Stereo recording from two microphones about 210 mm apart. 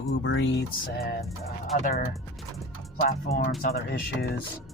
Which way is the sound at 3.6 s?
45° left (ahead or behind).